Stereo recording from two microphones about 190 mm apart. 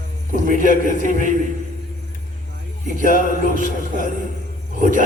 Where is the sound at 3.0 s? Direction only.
45° right (ahead or behind).